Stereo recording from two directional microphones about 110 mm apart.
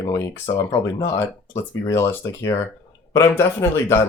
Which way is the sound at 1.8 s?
25° left (ahead or behind).